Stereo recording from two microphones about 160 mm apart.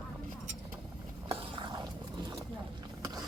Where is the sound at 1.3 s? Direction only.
35° right (ahead or behind).